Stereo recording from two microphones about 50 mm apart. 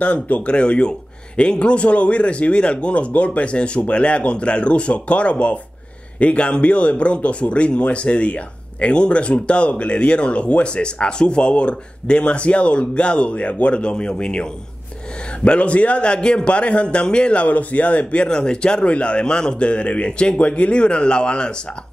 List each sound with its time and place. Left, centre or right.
0.0 s a man's voice: left